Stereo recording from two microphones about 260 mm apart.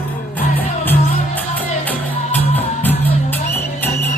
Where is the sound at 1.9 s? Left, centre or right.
Centre.